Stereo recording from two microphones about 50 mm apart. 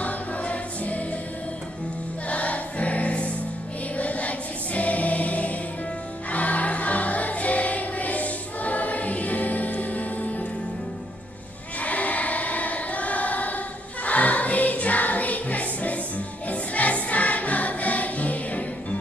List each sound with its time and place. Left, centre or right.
0.0 s music: left
2.2 s music: left
11.8 s choir: left
14.0 s music: left